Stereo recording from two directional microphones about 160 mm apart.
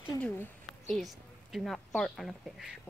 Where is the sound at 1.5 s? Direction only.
Centre (ahead or behind).